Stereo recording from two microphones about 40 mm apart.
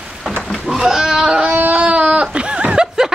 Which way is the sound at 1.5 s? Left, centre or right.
Right.